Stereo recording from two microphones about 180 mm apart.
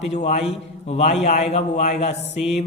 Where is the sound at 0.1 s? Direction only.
40° left (ahead or behind).